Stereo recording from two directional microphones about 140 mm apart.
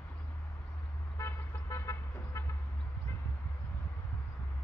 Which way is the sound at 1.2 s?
20° left (ahead or behind).